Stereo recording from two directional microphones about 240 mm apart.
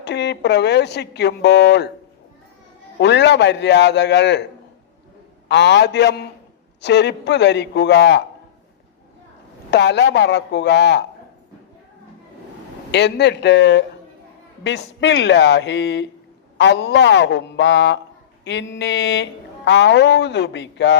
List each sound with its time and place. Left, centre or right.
0.0 s speech: left
3.0 s speech: left
5.5 s speech: left
9.6 s speech: left
12.9 s speech: left